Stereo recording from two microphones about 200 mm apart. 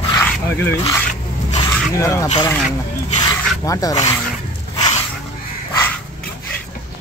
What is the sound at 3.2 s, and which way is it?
Dog, 15° left (ahead or behind).